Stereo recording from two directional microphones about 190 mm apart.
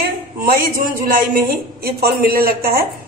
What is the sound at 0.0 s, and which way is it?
Speech, 50° right (ahead or behind).